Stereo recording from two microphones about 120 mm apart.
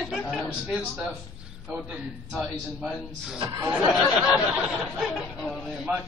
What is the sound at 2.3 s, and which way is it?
Speech, centre (ahead or behind).